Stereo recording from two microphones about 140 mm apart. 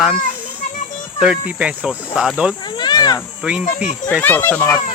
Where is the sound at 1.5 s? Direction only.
10° right (ahead or behind).